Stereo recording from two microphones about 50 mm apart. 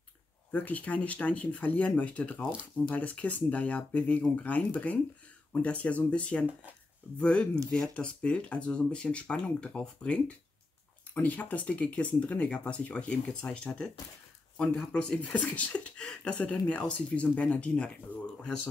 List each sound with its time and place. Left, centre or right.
0.5 s speech: left
11.1 s speech: left